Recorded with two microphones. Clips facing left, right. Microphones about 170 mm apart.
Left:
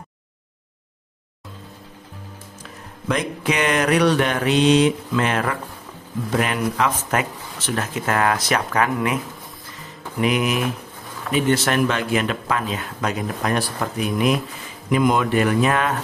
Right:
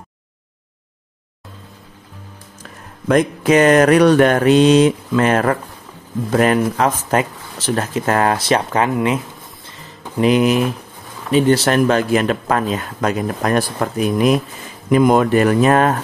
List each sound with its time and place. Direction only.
3.1 s speech: 45° right (ahead or behind)